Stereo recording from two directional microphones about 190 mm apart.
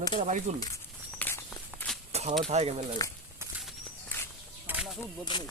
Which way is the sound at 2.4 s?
35° right (ahead or behind).